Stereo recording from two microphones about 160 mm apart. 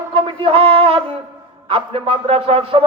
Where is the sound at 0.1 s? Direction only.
35° right (ahead or behind).